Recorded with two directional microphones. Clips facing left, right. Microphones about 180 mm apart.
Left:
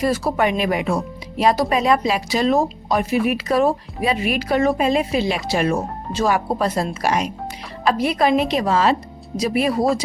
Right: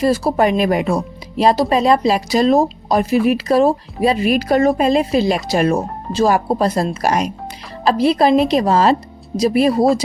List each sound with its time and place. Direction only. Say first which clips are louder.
0.0 s a woman's voice: right 4 dB; 35° right (ahead or behind)
7.9 s a woman's voice: right 4 dB; 30° right (ahead or behind)